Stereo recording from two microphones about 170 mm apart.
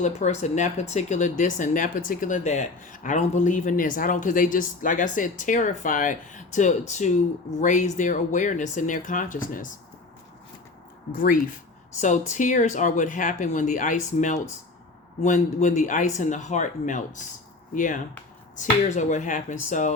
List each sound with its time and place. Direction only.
0.0 s speech: 45° left (ahead or behind)
11.1 s speech: 55° left (ahead or behind)